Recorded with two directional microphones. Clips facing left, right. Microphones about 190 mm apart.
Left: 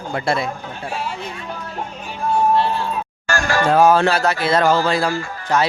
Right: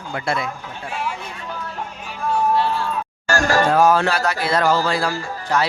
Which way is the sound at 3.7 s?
25° left (ahead or behind).